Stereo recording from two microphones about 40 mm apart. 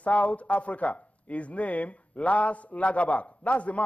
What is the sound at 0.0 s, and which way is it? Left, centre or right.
A man's voice, left.